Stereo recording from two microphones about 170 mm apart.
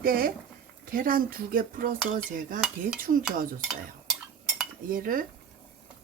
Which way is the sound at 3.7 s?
Centre (ahead or behind).